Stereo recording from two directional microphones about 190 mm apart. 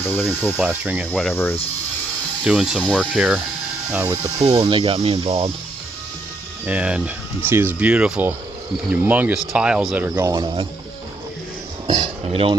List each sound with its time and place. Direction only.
0.0 s speech: 10° left (ahead or behind)
0.5 s speech: 10° right (ahead or behind)
1.1 s speech: 5° left (ahead or behind)
2.4 s speech: 5° right (ahead or behind)
2.8 s speech: 5° left (ahead or behind); by 4.2 s 10° right (ahead or behind)
4.4 s speech: 35° right (ahead or behind)
6.7 s speech: 5° right (ahead or behind)
10.4 s speech: 25° right (ahead or behind)
11.9 s cutlery: 25° right (ahead or behind)